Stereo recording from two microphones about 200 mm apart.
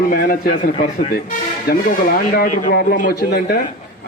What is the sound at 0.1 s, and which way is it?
A man's voice, 45° left (ahead or behind).